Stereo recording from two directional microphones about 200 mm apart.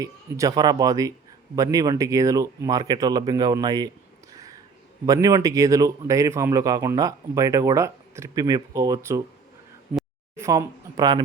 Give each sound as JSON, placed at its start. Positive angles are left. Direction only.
{"t": 0.0, "sound": "a man's voice", "side_deg": -15}
{"t": 5.0, "sound": "a man's voice", "side_deg": -15}
{"t": 10.3, "sound": "speech", "side_deg": -15}